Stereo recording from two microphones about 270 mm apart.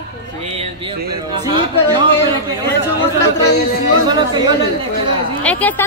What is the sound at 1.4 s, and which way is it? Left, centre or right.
Speech, centre.